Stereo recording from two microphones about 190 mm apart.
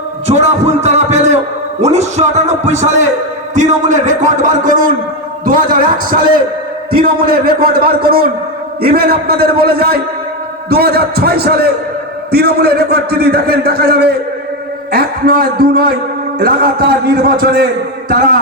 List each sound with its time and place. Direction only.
0.3 s music: 35° right (ahead or behind)
1.8 s a man's voice: 35° right (ahead or behind); by 17.7 s 50° right (ahead or behind)